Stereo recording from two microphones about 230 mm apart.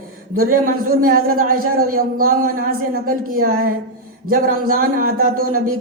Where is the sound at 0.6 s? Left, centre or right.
Right.